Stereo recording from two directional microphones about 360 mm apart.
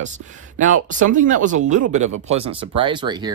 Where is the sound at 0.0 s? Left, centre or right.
Right.